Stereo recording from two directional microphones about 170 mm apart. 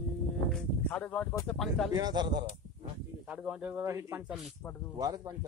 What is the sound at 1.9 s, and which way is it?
Speech, 20° right (ahead or behind).